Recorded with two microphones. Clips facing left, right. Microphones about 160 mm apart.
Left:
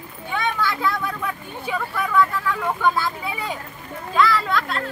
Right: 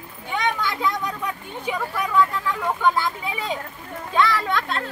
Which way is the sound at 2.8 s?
20° right (ahead or behind).